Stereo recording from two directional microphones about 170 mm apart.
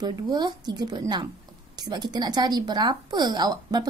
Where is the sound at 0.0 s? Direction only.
25° right (ahead or behind).